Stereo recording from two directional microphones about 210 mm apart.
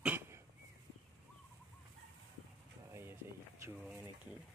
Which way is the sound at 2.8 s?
10° right (ahead or behind).